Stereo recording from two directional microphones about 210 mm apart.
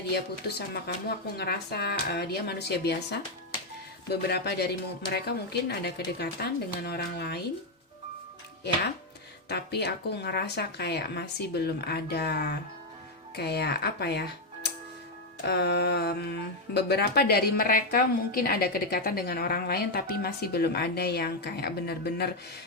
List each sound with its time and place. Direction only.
0.1 s speech: 50° left (ahead or behind)
9.5 s speech: 50° left (ahead or behind)